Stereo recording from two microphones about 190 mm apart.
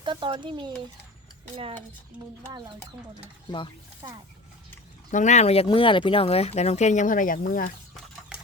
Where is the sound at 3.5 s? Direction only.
25° left (ahead or behind).